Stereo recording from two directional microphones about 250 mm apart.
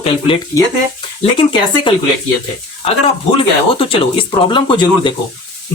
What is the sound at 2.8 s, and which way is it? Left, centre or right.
Speech, left.